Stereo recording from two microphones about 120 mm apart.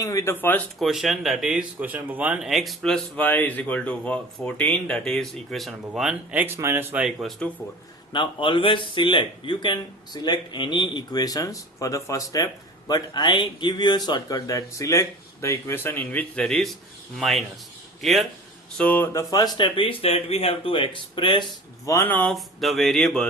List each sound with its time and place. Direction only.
0.0 s speech: 25° left (ahead or behind)
0.3 s speech: 15° left (ahead or behind)
0.8 s speech: centre (ahead or behind)
7.2 s speech: 5° left (ahead or behind)
8.1 s a man's voice: 40° left (ahead or behind); by 18.3 s centre (ahead or behind)
18.8 s speech: 15° left (ahead or behind)
19.1 s speech: 30° left (ahead or behind)
19.5 s speech: 45° left (ahead or behind)
21.8 s speech: 20° left (ahead or behind)
22.3 s speech: centre (ahead or behind)